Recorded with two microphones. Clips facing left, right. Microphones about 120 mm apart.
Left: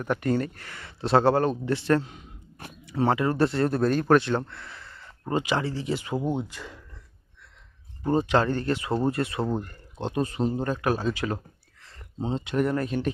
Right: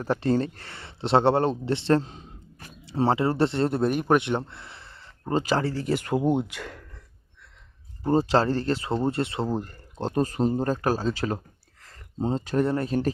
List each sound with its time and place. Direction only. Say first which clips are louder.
0.0 s speech: right 2 dB; 30° right (ahead or behind)
5.3 s speech: right 2 dB; 35° right (ahead or behind); by 6.1 s 55° right (ahead or behind)
6.1 s speech: right 5 dB; 10° right (ahead or behind)
6.5 s a sound: right 3 dB; 65° right (ahead or behind)
8.0 s speech: right 1 dB; 35° right (ahead or behind)